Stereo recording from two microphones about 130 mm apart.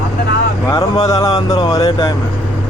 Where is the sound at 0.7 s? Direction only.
25° left (ahead or behind).